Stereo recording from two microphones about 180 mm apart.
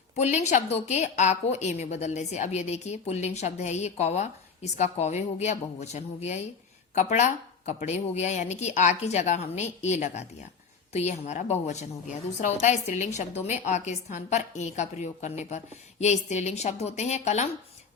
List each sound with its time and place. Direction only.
0.2 s a woman's voice: 40° left (ahead or behind)